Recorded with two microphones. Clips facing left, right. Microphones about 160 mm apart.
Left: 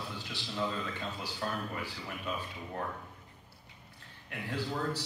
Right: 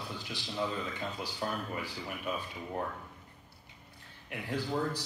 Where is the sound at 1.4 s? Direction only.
15° right (ahead or behind).